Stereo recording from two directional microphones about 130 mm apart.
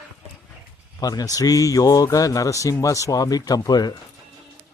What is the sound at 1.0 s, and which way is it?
A man's voice, 30° left (ahead or behind).